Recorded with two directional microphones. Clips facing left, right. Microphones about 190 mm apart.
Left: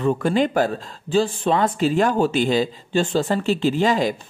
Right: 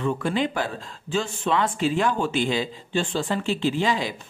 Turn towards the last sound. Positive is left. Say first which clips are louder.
# left 5 dB
turn(degrees=45)  # may be behind; listen again after turning